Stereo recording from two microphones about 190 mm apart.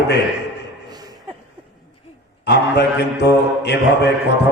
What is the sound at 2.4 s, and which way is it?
Mantra, 60° left (ahead or behind).